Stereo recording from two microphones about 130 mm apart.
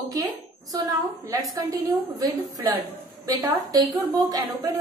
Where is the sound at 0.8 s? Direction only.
25° right (ahead or behind).